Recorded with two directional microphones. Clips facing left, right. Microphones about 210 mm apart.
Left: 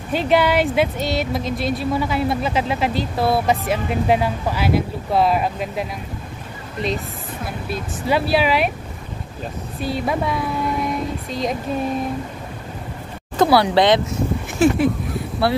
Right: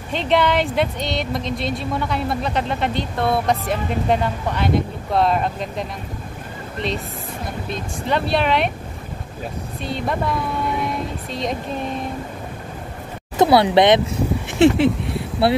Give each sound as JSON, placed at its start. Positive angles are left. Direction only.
{"t": 0.1, "sound": "speech", "side_deg": 5}
{"t": 9.8, "sound": "speech", "side_deg": 5}
{"t": 13.4, "sound": "speech", "side_deg": -20}
{"t": 15.5, "sound": "speech", "side_deg": -25}